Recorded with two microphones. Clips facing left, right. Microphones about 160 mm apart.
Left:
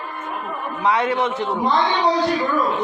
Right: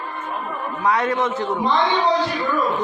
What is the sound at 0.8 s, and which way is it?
Speech, 10° left (ahead or behind).